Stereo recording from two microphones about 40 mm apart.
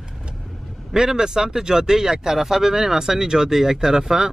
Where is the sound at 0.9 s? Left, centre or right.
Centre.